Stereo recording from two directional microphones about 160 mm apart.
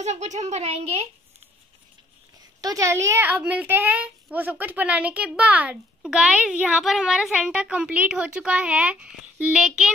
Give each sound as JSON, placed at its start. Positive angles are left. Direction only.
{"t": 0.0, "sound": "a woman's voice", "side_deg": -45}
{"t": 2.6, "sound": "a woman's voice", "side_deg": -20}